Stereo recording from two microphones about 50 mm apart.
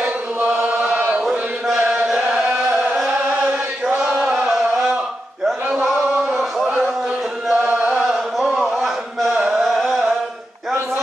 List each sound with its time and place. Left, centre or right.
0.0 s chant: right
2.1 s carnatic music: centre
4.1 s chant: centre
4.7 s a sound: right
7.5 s music: right
9.3 s chant: right
9.8 s chant: centre